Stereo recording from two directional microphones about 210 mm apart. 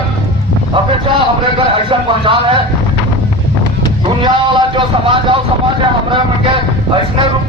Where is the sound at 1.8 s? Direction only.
25° right (ahead or behind).